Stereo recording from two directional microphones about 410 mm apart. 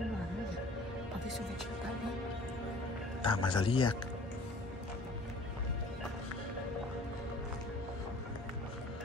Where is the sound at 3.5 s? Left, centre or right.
Centre.